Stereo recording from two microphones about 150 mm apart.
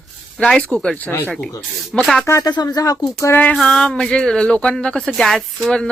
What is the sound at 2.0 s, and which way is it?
Speech, centre (ahead or behind).